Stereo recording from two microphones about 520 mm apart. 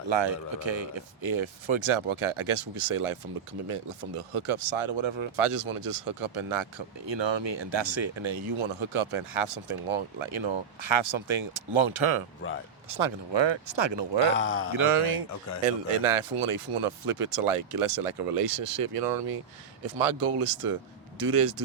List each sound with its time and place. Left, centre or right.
0.1 s speech: right
4.2 s speech: right
12.4 s speech: left
12.9 s speech: right
14.3 s speech: left
14.8 s speech: right